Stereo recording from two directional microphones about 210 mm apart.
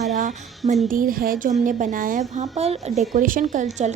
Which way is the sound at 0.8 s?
40° right (ahead or behind).